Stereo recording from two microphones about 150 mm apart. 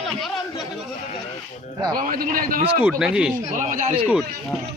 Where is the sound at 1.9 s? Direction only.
70° right (ahead or behind).